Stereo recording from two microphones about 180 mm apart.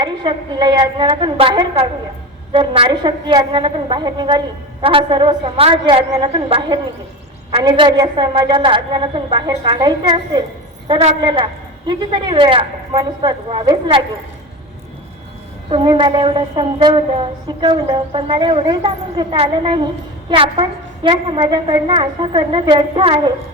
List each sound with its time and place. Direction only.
0.0 s a woman's voice: 25° right (ahead or behind)
6.3 s a woman's voice: 30° right (ahead or behind)
15.7 s a woman's voice: 25° right (ahead or behind)